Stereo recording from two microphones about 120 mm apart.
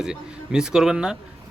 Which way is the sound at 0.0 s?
5° right (ahead or behind).